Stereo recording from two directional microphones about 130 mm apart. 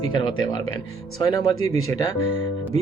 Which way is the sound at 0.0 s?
35° left (ahead or behind).